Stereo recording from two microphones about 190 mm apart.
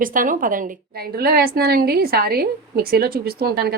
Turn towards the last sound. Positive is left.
turn(degrees=-55)  # may be behind; listen again after turning